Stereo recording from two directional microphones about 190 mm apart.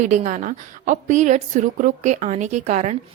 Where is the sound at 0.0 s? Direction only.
40° right (ahead or behind).